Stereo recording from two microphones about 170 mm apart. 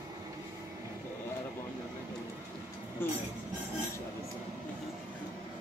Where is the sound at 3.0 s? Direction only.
15° left (ahead or behind).